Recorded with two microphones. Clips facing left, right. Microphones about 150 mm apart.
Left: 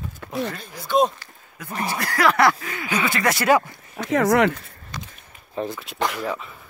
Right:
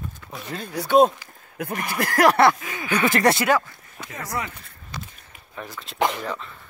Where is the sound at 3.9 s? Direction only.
80° left.